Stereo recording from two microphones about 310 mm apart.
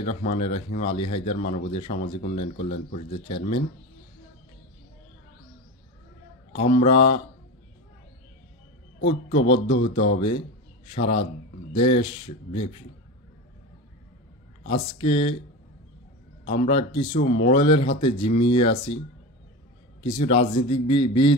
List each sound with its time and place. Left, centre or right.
0.0 s speech: left
6.6 s speech: centre
9.0 s speech: centre
14.7 s speech: centre
16.4 s speech: centre
20.0 s speech: centre